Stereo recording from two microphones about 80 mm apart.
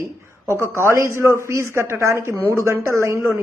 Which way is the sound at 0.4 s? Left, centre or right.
Right.